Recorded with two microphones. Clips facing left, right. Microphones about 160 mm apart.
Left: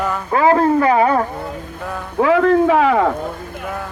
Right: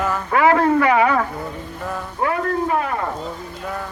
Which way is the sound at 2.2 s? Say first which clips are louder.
Left 9 dB; 90° left.